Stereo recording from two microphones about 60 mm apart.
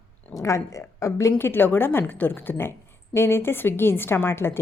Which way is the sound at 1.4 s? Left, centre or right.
Left.